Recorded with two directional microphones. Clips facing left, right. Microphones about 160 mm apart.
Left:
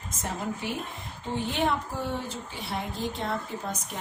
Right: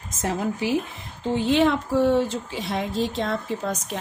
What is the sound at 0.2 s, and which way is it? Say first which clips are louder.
Speech: right 8 dB; 90° right.